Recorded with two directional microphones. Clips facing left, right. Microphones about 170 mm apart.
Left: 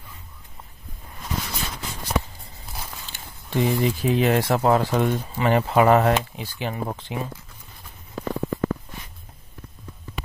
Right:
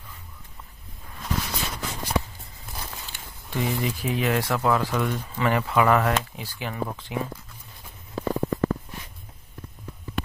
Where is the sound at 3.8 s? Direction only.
30° left (ahead or behind).